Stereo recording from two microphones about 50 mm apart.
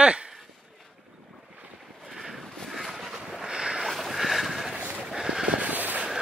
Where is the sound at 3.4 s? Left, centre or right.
Centre.